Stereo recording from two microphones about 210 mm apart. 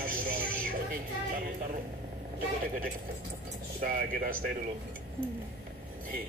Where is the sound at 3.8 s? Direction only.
40° right (ahead or behind).